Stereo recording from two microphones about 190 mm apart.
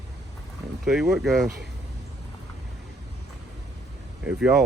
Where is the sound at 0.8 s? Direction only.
Centre (ahead or behind).